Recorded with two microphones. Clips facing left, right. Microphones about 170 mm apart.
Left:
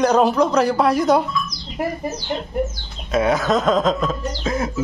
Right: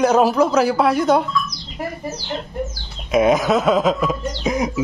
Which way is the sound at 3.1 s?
15° right (ahead or behind).